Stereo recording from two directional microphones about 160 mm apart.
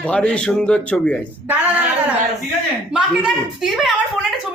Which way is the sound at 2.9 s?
5° right (ahead or behind).